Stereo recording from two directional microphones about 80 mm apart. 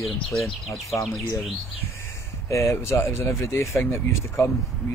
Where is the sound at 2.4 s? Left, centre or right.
Left.